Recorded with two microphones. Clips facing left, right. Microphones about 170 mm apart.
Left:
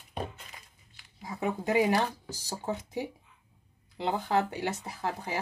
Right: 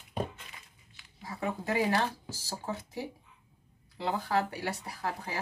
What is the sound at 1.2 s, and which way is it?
Speech, 15° left (ahead or behind).